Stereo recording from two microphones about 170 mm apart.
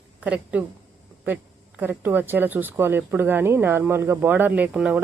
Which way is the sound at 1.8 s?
10° right (ahead or behind).